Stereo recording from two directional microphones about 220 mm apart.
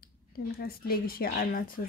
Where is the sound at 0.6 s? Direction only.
45° left (ahead or behind).